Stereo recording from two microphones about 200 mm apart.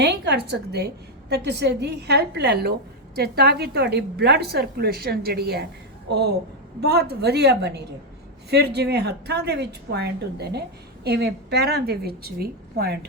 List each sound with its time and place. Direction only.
0.0 s a woman's voice: 55° right (ahead or behind)